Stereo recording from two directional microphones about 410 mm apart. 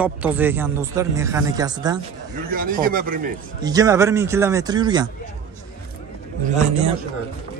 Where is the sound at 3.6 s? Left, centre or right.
Centre.